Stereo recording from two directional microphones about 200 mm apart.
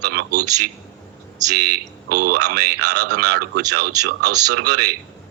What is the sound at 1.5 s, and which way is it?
Speech, 50° right (ahead or behind).